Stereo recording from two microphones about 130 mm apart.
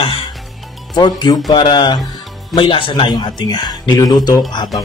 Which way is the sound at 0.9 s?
35° left (ahead or behind).